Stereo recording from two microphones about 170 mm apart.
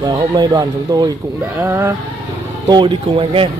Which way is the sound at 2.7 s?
30° right (ahead or behind).